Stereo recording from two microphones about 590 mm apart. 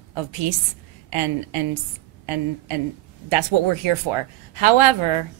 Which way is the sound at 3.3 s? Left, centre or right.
Right.